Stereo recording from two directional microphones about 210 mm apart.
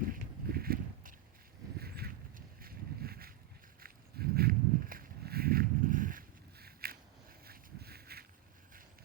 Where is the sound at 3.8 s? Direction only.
45° right (ahead or behind).